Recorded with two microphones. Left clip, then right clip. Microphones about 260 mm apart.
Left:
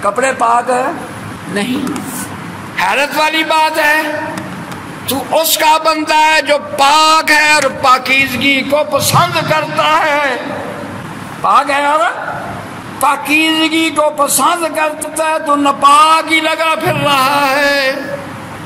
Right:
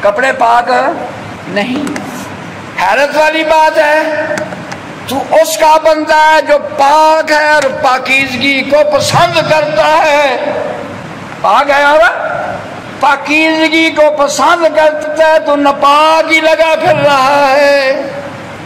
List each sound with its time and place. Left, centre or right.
0.0 s a man's voice: left
2.8 s a man's voice: left
5.3 s a man's voice: left
11.4 s a man's voice: left